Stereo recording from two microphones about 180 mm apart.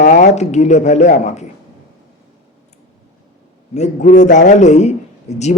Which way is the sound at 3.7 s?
40° left (ahead or behind).